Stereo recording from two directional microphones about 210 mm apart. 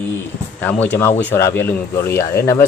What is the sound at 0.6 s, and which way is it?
Speech, 10° left (ahead or behind).